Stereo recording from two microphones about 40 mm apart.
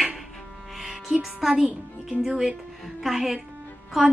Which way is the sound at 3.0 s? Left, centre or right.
Centre.